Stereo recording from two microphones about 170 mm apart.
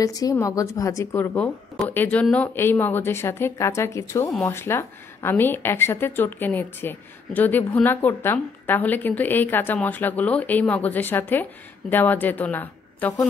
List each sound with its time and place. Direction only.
0.0 s speech: 20° left (ahead or behind)